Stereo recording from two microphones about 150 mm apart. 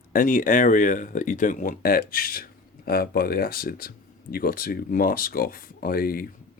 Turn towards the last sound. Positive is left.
turn(degrees=85)